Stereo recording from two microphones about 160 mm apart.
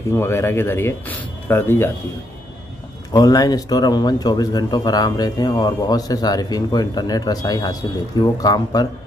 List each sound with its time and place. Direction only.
0.1 s speech: 15° left (ahead or behind)
3.1 s speech: 25° left (ahead or behind)